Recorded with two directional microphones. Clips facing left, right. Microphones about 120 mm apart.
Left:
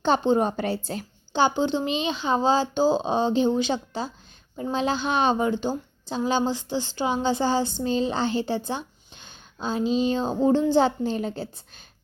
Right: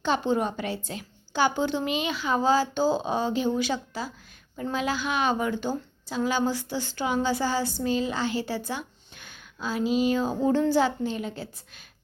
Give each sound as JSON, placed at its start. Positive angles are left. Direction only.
{"t": 0.0, "sound": "a woman's voice", "side_deg": 30}
{"t": 1.3, "sound": "speech", "side_deg": 25}